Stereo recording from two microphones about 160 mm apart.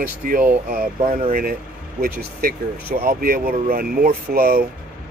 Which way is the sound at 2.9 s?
65° right (ahead or behind).